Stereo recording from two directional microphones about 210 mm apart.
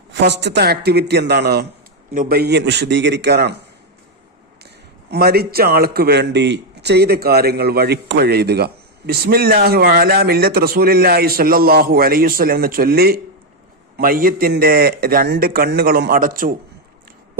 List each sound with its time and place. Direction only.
0.1 s a man's voice: 55° right (ahead or behind)
5.1 s a man's voice: 50° right (ahead or behind)